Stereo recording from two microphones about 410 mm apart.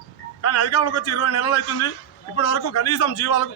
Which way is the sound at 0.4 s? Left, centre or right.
Left.